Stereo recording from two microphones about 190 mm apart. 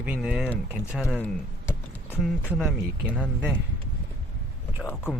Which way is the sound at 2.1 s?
5° right (ahead or behind).